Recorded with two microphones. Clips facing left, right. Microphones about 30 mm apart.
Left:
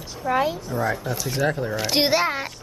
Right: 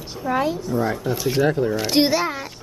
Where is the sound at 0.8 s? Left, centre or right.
Centre.